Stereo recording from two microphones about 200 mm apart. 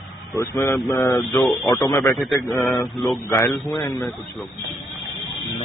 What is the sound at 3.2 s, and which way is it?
Speech, 15° left (ahead or behind).